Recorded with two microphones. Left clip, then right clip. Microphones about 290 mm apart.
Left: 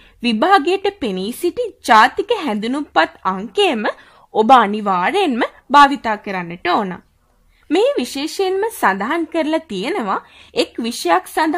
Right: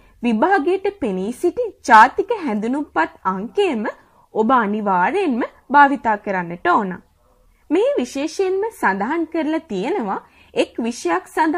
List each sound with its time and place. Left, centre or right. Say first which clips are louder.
0.2 s a woman's voice: left 3 dB; centre
1.1 s a woman's voice: even; centre